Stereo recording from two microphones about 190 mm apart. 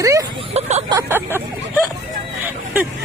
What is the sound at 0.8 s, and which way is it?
Vehicle, 15° right (ahead or behind).